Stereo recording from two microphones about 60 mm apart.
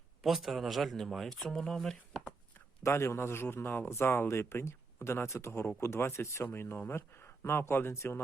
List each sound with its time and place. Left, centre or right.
0.2 s speech: centre
2.8 s speech: left